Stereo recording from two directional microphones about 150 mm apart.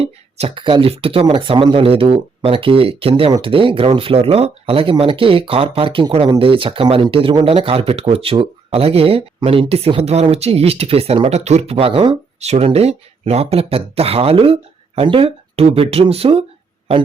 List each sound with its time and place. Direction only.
0.0 s speech: 40° right (ahead or behind)